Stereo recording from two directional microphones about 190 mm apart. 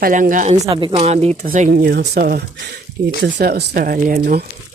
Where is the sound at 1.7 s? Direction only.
55° right (ahead or behind).